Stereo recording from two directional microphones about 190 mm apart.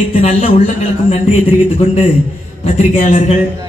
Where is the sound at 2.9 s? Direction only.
40° left (ahead or behind).